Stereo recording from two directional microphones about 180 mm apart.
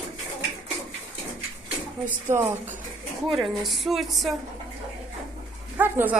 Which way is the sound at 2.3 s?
10° right (ahead or behind).